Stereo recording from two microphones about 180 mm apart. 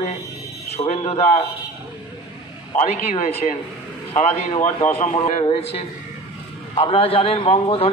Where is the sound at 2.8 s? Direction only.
40° left (ahead or behind).